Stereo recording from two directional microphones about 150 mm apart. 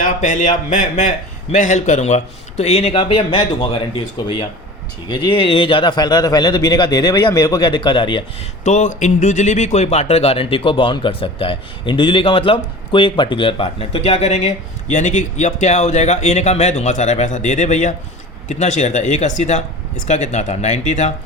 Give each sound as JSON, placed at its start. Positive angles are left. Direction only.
{"t": 0.0, "sound": "speech", "side_deg": 60}
{"t": 5.0, "sound": "a man's voice", "side_deg": 30}
{"t": 8.6, "sound": "speech", "side_deg": 55}